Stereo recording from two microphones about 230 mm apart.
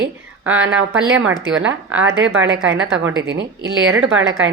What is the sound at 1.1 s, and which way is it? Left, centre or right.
A woman's voice, right.